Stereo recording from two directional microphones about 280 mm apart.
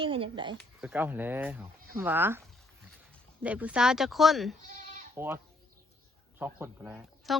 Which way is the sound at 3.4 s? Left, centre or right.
Centre.